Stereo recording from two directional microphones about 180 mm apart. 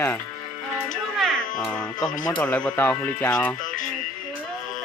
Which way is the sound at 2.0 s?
25° left (ahead or behind).